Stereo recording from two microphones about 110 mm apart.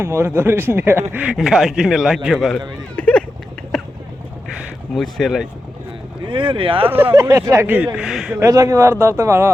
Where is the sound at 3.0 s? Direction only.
15° left (ahead or behind).